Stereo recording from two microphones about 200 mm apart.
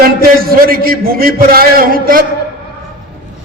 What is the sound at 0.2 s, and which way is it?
A man's voice, 50° right (ahead or behind).